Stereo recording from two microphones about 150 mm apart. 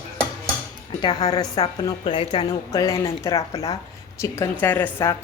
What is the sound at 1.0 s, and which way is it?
A woman's voice, 30° left (ahead or behind).